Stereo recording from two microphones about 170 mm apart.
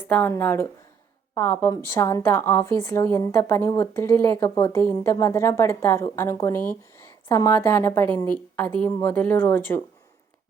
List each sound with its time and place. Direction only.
0.0 s a woman's voice: 10° left (ahead or behind)